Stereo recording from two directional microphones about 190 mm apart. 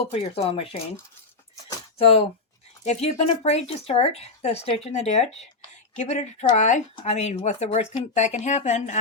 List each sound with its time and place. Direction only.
0.0 s speech: 30° left (ahead or behind)
2.0 s speech: 30° left (ahead or behind)